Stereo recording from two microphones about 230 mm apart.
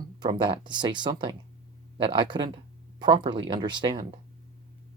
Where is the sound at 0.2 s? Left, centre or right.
Centre.